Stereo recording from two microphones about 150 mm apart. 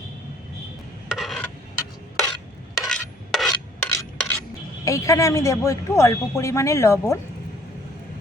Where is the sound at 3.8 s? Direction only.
15° left (ahead or behind).